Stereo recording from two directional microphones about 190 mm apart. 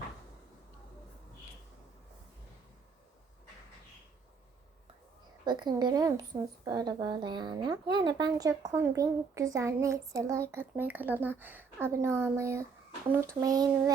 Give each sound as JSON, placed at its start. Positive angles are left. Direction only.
{"t": 5.5, "sound": "a woman's voice", "side_deg": -20}